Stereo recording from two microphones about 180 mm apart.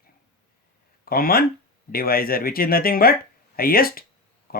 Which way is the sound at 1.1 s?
55° left (ahead or behind).